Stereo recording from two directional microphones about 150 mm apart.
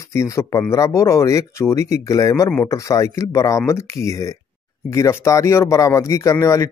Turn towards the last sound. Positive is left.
turn(degrees=20)  # may be behind; listen again after turning